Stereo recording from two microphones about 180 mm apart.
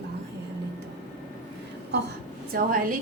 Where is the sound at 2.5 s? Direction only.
50° right (ahead or behind).